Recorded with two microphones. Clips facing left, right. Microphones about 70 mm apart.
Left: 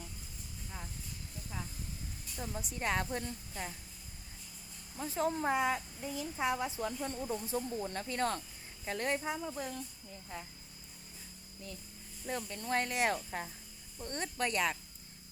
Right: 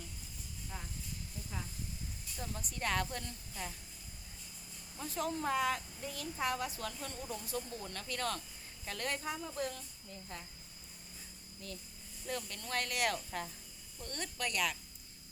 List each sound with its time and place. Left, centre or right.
2.3 s speech: centre
4.9 s speech: left
12.2 s speech: left